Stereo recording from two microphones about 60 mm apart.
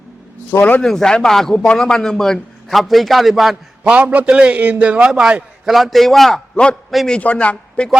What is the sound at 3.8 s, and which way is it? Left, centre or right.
A man's voice, right.